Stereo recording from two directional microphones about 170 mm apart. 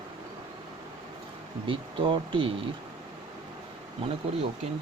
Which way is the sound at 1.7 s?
30° right (ahead or behind).